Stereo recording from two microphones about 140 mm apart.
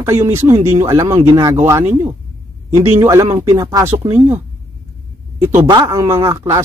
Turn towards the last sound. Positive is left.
turn(degrees=-20)  # may be behind; listen again after turning